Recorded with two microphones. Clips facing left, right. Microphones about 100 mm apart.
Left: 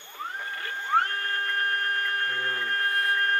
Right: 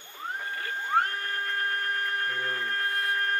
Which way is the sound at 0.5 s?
30° right (ahead or behind).